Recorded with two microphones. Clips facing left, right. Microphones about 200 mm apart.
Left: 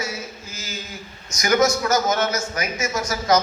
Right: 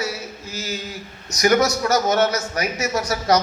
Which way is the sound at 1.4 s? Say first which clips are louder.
Right 1 dB; 35° right (ahead or behind).